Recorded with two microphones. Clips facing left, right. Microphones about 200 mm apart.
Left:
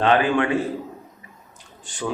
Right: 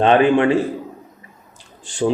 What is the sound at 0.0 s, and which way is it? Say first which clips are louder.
Speech: right 5 dB; 20° right (ahead or behind).